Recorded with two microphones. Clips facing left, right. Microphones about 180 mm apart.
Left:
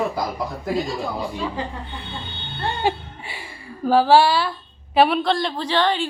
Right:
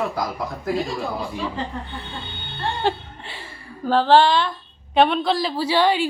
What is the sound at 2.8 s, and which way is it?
A woman's voice, 10° left (ahead or behind).